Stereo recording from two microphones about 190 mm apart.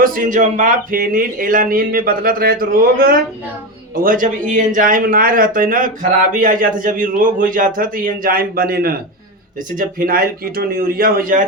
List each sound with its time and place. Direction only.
0.0 s speech: 45° right (ahead or behind)